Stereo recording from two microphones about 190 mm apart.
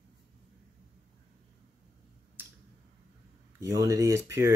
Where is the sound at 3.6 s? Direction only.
15° right (ahead or behind).